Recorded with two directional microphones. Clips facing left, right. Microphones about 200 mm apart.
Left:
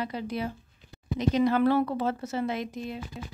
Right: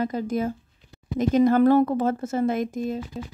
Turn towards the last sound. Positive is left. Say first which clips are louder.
# right 7 dB
turn(degrees=-45)  # may be behind; listen again after turning